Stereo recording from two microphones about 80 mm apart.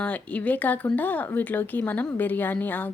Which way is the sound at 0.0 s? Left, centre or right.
Centre.